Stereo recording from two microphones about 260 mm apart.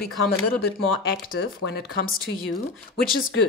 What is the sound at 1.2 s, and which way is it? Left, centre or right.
Speech, left.